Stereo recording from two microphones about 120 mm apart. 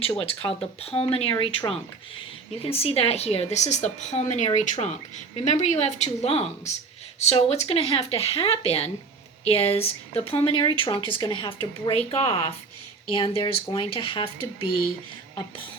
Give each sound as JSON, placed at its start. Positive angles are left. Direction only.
{"t": 0.2, "sound": "a woman's voice", "side_deg": 50}